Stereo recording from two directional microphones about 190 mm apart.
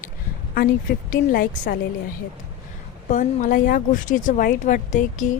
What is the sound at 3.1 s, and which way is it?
Speech, 40° left (ahead or behind).